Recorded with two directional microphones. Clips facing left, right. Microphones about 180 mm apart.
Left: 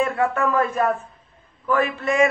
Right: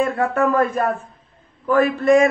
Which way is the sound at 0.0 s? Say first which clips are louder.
Right 2 dB; 45° right (ahead or behind).